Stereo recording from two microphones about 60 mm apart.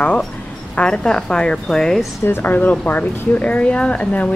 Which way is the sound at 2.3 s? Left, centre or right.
Left.